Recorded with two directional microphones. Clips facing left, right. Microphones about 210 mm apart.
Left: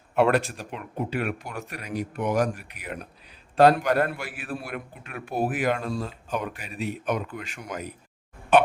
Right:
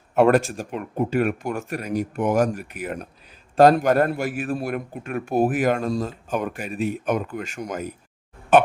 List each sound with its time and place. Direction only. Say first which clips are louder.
0.1 s a man's voice: right 5 dB; 45° right (ahead or behind)